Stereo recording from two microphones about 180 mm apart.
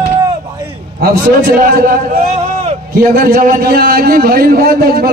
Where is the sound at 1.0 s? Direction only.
55° right (ahead or behind).